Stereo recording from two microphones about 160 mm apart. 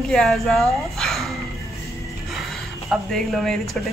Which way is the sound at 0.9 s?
Centre (ahead or behind).